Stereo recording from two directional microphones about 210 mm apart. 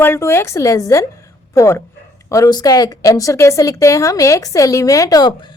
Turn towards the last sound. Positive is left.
turn(degrees=20)  # may be behind; listen again after turning